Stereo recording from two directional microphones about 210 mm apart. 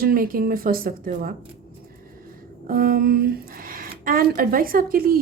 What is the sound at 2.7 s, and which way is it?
A woman's voice, 45° right (ahead or behind).